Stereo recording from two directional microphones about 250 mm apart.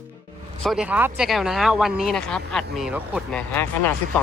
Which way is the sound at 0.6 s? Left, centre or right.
Centre.